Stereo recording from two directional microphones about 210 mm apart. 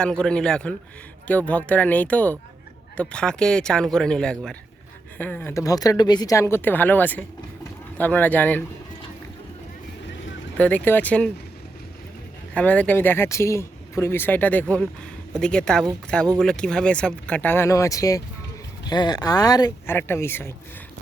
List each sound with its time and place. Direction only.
0.0 s a man's voice: 5° left (ahead or behind)
10.6 s speech: 10° left (ahead or behind)
12.5 s a man's voice: 5° left (ahead or behind)